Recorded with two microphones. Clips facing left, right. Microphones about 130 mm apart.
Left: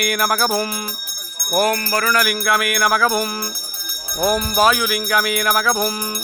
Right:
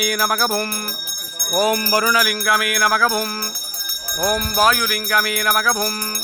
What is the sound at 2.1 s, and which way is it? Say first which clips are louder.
Speech: left 1 dB; centre (ahead or behind).